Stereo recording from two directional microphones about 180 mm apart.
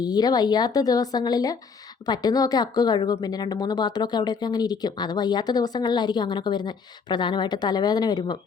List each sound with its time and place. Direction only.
0.0 s speech: 20° left (ahead or behind)